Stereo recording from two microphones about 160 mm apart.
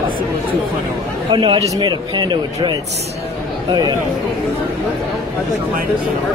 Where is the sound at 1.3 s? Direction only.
30° right (ahead or behind).